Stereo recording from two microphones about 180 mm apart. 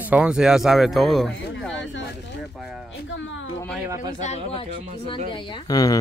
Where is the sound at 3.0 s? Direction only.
90° left.